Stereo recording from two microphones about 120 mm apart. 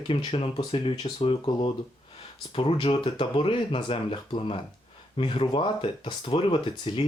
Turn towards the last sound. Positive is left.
turn(degrees=40)  # may be behind; listen again after turning